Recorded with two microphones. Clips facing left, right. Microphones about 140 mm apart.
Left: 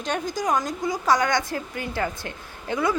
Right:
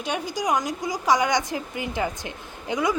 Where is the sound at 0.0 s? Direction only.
10° right (ahead or behind).